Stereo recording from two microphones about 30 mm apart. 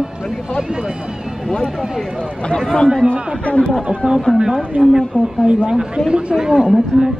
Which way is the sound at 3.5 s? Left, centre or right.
Left.